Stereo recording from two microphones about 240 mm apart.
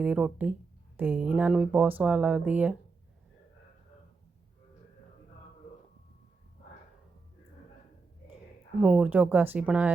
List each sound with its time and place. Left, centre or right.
0.0 s speech: centre
8.8 s speech: centre